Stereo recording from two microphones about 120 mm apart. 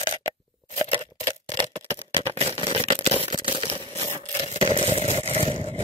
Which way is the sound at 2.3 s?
55° right (ahead or behind).